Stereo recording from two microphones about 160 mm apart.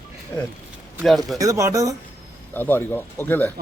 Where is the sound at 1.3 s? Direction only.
20° right (ahead or behind).